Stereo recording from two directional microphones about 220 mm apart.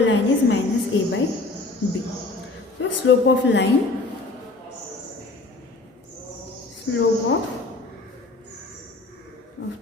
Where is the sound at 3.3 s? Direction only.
55° left (ahead or behind).